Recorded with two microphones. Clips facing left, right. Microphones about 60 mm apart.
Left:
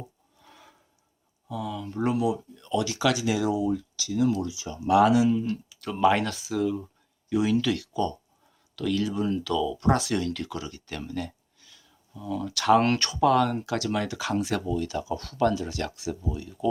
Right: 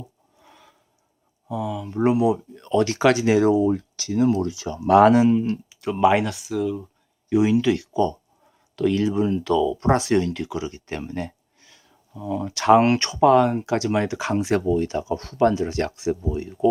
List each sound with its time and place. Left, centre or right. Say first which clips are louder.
0.4 s a sound: right 1 dB; centre
1.5 s speech: right 5 dB; right
4.5 s speech: right 6 dB; right
4.9 s speech: right 5 dB; right; by 6.3 s centre
6.3 s speech: right 2 dB; centre
7.3 s speech: right 6 dB; right